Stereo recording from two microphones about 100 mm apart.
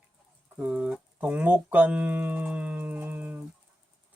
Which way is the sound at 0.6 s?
10° right (ahead or behind).